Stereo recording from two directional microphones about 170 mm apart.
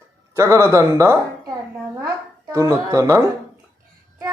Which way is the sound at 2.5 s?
15° right (ahead or behind).